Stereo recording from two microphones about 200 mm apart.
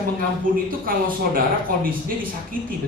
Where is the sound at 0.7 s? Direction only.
45° right (ahead or behind).